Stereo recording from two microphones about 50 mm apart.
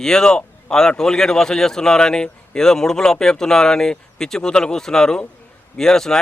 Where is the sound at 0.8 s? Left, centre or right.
Centre.